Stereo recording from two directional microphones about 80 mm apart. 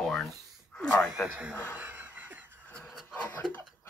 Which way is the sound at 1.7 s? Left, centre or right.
Right.